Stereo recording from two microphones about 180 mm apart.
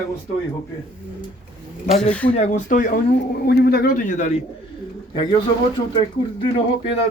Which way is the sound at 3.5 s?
60° left (ahead or behind).